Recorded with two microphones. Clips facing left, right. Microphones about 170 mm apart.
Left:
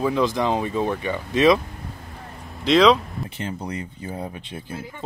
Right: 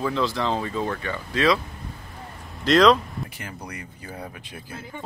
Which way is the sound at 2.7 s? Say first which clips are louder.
Left 1 dB; 5° left (ahead or behind).